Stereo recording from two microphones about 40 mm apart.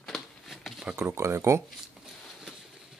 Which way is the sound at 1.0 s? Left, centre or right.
Right.